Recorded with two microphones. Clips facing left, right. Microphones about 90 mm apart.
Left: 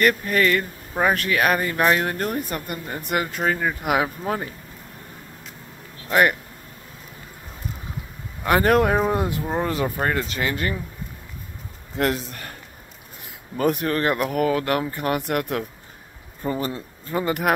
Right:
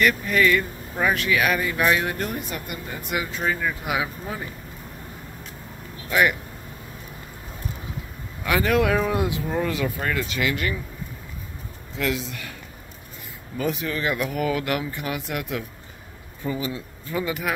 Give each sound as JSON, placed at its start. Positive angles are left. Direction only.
{"t": 0.0, "sound": "speech", "side_deg": 45}
{"t": 6.0, "sound": "speech", "side_deg": 45}
{"t": 8.5, "sound": "speech", "side_deg": 45}
{"t": 9.4, "sound": "speech", "side_deg": 30}
{"t": 11.9, "sound": "speech", "side_deg": 50}
{"t": 13.6, "sound": "speech", "side_deg": 50}